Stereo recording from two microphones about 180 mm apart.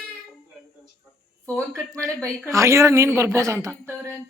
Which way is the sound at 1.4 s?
15° right (ahead or behind).